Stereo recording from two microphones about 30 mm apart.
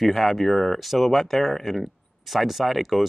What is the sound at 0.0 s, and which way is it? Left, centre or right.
Speech, centre.